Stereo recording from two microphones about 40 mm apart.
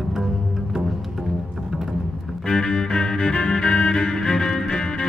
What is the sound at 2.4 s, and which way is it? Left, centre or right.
Music, centre.